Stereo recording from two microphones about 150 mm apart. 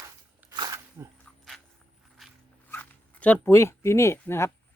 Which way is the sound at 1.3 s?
10° left (ahead or behind).